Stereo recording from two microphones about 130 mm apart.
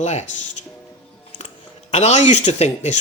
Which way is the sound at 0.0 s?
60° left (ahead or behind).